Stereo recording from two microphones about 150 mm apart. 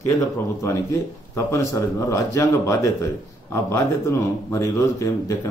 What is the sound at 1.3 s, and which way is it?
A man's voice, 20° left (ahead or behind).